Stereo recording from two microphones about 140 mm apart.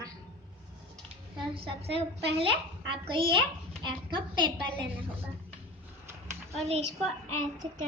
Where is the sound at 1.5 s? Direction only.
45° right (ahead or behind).